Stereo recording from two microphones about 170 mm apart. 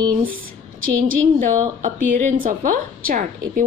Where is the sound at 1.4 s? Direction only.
50° right (ahead or behind).